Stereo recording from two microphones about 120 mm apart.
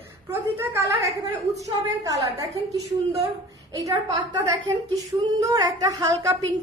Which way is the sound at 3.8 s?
30° right (ahead or behind).